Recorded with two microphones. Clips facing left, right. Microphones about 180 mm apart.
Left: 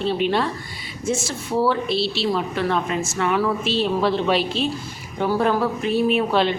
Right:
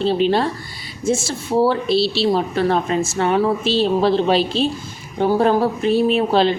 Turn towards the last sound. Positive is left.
turn(degrees=-35)  # may be behind; listen again after turning